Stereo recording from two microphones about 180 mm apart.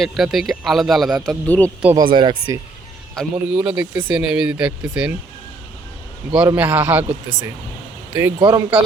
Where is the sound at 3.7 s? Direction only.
20° right (ahead or behind).